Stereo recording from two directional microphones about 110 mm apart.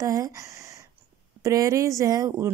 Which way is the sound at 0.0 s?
30° right (ahead or behind).